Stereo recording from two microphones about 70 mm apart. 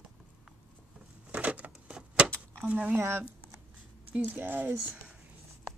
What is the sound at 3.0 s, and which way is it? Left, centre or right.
A woman's voice, right.